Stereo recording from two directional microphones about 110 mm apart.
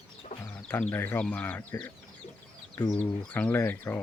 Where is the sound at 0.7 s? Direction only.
15° left (ahead or behind).